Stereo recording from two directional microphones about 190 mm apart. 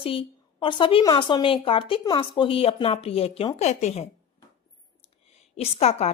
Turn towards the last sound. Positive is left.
turn(degrees=35)  # may be behind; listen again after turning